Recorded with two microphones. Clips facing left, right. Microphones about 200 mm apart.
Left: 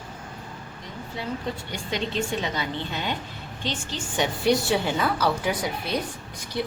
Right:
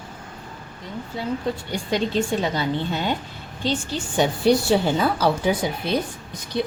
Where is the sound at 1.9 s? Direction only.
35° right (ahead or behind).